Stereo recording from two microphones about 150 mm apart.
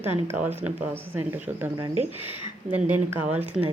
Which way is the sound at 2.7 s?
10° right (ahead or behind).